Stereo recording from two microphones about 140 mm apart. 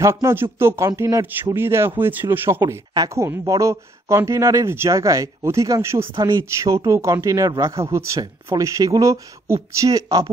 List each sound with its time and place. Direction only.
0.0 s speech: 20° right (ahead or behind)